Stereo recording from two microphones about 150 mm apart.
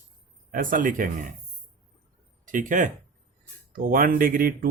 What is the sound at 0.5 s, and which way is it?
Speech, 65° right (ahead or behind).